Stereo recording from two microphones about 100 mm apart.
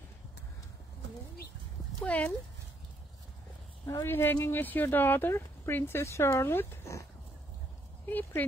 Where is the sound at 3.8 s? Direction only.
30° left (ahead or behind).